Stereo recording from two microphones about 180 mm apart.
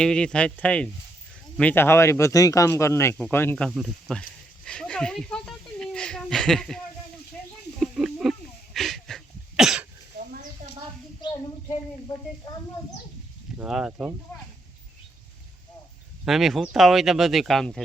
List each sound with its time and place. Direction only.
0.0 s speech: 5° left (ahead or behind)
3.7 s a sound: centre (ahead or behind)
11.2 s child singing: 25° left (ahead or behind)
13.6 s speech: 5° right (ahead or behind)
16.2 s speech: centre (ahead or behind)